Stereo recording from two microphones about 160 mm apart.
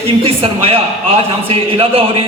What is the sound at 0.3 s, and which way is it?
Speech, 35° right (ahead or behind).